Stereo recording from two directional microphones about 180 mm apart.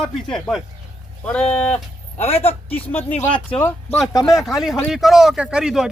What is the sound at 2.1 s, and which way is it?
Speech, 35° left (ahead or behind).